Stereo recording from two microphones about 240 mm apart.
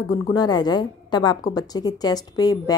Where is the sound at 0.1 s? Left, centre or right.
Centre.